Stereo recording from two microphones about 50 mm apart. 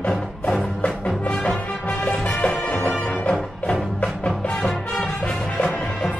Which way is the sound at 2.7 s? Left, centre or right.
Left.